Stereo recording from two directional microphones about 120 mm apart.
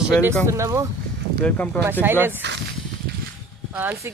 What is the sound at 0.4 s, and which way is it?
Speech, 25° right (ahead or behind).